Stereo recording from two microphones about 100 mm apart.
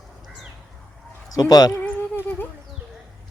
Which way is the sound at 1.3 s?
40° left (ahead or behind).